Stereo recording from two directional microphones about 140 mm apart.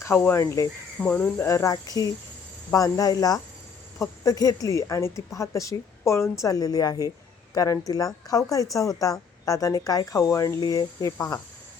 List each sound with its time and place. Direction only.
0.0 s speech: 20° left (ahead or behind)
1.0 s speech: 10° left (ahead or behind)
1.5 s speech: 25° left (ahead or behind)